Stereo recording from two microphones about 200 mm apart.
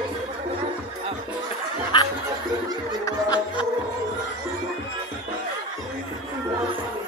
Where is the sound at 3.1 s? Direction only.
20° left (ahead or behind).